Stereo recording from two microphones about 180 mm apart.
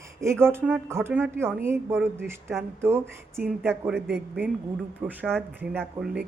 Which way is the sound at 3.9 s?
65° right (ahead or behind).